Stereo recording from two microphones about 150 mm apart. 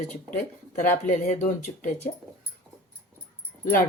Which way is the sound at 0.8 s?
60° left (ahead or behind).